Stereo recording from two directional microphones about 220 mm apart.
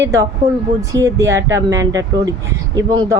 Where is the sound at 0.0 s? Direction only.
15° right (ahead or behind).